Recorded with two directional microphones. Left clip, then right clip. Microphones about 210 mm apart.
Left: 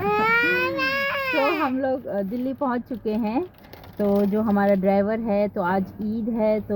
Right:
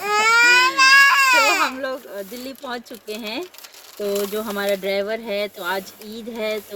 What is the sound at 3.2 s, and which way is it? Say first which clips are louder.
Speech: left 1 dB; 30° left (ahead or behind).